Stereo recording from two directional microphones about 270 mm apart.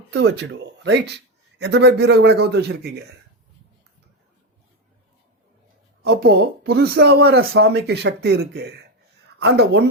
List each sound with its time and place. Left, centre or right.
0.1 s speech: right
6.0 s speech: right